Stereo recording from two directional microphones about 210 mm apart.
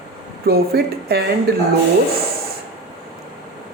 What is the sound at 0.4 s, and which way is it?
Speech, 50° right (ahead or behind).